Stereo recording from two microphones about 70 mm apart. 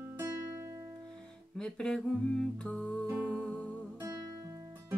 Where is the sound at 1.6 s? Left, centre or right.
Centre.